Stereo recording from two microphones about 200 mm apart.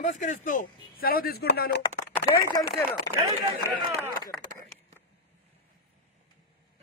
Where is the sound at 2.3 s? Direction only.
15° left (ahead or behind).